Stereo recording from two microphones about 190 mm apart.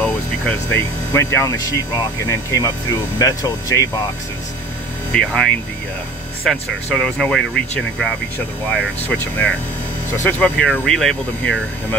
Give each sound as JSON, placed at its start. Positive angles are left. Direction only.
{"t": 0.0, "sound": "speech", "side_deg": 5}
{"t": 5.1, "sound": "speech", "side_deg": 5}